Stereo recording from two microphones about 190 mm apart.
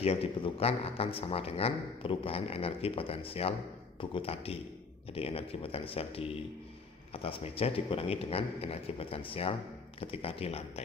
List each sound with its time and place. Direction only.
0.0 s a man's voice: 30° left (ahead or behind)